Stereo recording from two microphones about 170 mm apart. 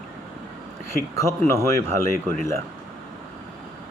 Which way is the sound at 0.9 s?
15° left (ahead or behind).